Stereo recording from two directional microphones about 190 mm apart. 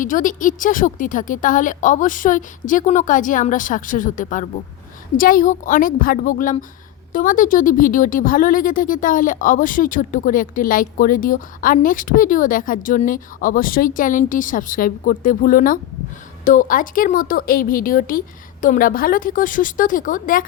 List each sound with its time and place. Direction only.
0.0 s a woman's voice: 45° left (ahead or behind)